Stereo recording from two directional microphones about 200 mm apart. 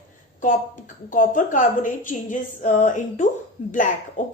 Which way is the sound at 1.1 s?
40° left (ahead or behind).